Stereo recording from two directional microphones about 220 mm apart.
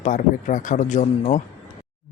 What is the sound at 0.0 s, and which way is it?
Speech, 35° left (ahead or behind).